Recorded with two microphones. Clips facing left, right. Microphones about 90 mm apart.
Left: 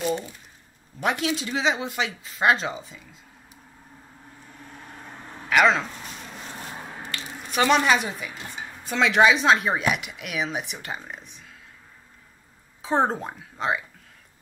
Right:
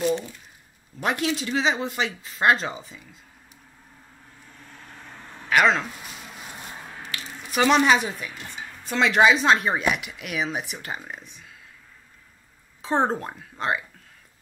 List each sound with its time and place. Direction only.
1.0 s speech: centre (ahead or behind)
4.6 s vehicle: 15° left (ahead or behind)
5.5 s a sound: centre (ahead or behind)
6.7 s squish: 15° left (ahead or behind)
7.3 s a woman's voice: 5° right (ahead or behind)
8.5 s a sound: 20° left (ahead or behind)
8.8 s speech: centre (ahead or behind)
12.8 s speech: centre (ahead or behind)